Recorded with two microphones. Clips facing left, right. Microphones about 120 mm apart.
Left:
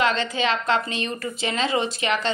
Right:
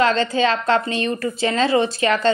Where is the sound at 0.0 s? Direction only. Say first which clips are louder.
Right 5 dB; 35° right (ahead or behind).